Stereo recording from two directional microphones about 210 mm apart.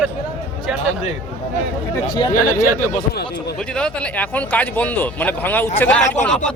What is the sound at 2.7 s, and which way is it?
Speech, 50° left (ahead or behind).